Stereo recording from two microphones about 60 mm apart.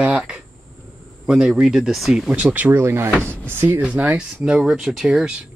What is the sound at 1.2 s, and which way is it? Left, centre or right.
Speech, centre.